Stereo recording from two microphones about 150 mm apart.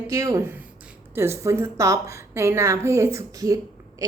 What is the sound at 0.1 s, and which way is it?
A woman's voice, 20° right (ahead or behind).